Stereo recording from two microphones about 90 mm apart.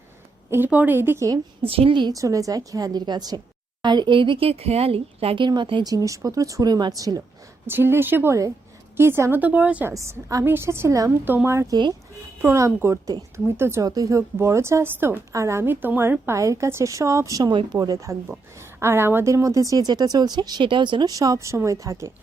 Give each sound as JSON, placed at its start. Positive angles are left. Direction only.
{"t": 0.5, "sound": "a woman's voice", "side_deg": -20}
{"t": 1.6, "sound": "a woman's voice", "side_deg": -90}
{"t": 2.1, "sound": "a woman's voice", "side_deg": -40}
{"t": 5.8, "sound": "speech", "side_deg": -40}
{"t": 7.7, "sound": "a woman's voice", "side_deg": -25}
{"t": 9.9, "sound": "a woman's voice", "side_deg": -35}
{"t": 11.7, "sound": "a woman's voice", "side_deg": -50}
{"t": 12.4, "sound": "a woman's voice", "side_deg": -30}
{"t": 13.8, "sound": "a woman's voice", "side_deg": -40}
{"t": 16.2, "sound": "speech", "side_deg": -35}
{"t": 18.8, "sound": "a woman's voice", "side_deg": -25}
{"t": 21.1, "sound": "speech", "side_deg": -40}